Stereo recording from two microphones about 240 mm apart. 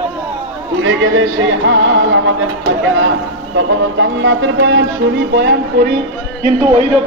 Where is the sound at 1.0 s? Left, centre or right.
Right.